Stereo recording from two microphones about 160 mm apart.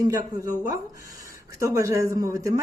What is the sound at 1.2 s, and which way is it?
Speech, 20° right (ahead or behind).